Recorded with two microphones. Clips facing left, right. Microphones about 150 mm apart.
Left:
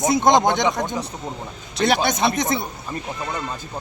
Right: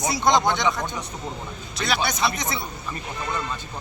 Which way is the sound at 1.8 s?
50° left (ahead or behind).